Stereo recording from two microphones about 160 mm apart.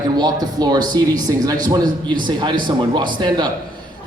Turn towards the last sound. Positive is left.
turn(degrees=-25)  # may be behind; listen again after turning